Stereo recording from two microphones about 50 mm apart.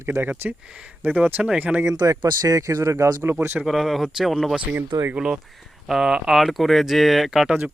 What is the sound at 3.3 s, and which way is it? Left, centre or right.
Speech, right.